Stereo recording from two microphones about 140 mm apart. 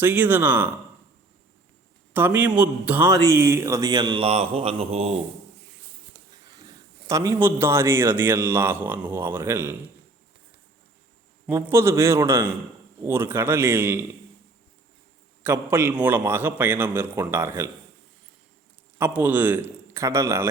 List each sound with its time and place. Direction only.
0.0 s a man's voice: 15° right (ahead or behind)
2.1 s a man's voice: 15° right (ahead or behind); by 5.2 s 50° right (ahead or behind)
7.1 s a man's voice: 20° right (ahead or behind)
11.4 s a man's voice: 15° right (ahead or behind)
15.4 s a man's voice: 15° right (ahead or behind)
18.9 s a man's voice: 15° right (ahead or behind)